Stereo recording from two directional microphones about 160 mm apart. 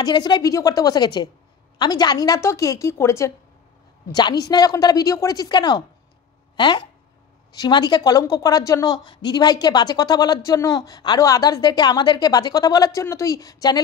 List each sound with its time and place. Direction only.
0.0 s a woman's voice: 25° left (ahead or behind)